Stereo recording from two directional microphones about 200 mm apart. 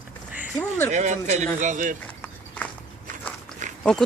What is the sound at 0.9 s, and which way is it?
Speech, 35° right (ahead or behind).